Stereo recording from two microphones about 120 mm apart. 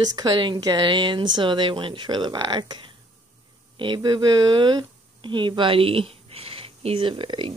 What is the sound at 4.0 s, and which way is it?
Speech, 35° right (ahead or behind).